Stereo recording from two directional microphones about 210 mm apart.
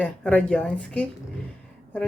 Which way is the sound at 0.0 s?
5° left (ahead or behind).